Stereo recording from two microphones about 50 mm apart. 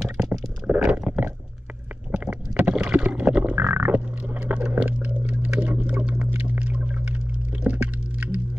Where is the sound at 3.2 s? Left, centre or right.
Right.